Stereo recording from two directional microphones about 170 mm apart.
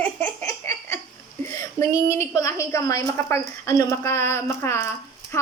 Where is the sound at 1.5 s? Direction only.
15° left (ahead or behind).